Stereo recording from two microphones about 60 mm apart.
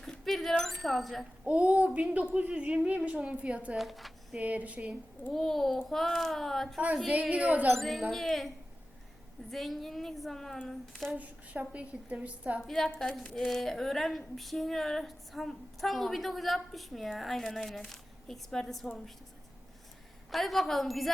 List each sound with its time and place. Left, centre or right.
0.0 s a sound: centre
1.5 s a woman's voice: right
3.8 s speech: centre
4.4 s a woman's voice: right
5.3 s a woman's voice: centre
6.7 s a woman's voice: centre
8.1 s a woman's voice: centre
9.5 s a woman's voice: centre
11.2 s a woman's voice: right
12.6 s a woman's voice: centre
20.3 s a woman's voice: centre